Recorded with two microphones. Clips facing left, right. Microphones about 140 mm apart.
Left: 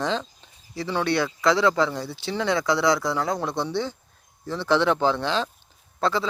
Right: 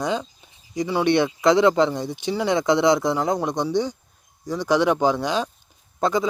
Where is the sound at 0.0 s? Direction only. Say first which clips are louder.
Right 2 dB; 10° right (ahead or behind).